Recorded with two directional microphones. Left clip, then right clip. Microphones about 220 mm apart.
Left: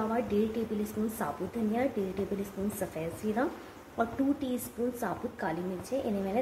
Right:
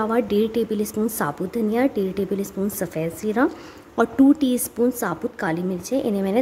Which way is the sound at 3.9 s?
50° right (ahead or behind).